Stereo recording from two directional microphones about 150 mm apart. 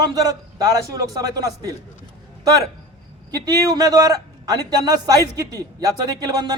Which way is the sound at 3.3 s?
25° right (ahead or behind).